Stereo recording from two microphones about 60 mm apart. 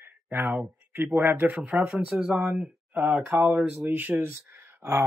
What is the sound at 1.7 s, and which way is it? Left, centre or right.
Speech, centre.